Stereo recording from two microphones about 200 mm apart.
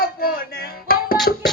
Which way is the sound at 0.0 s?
50° left (ahead or behind).